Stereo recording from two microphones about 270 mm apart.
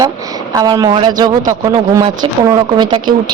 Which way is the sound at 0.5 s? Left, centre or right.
Centre.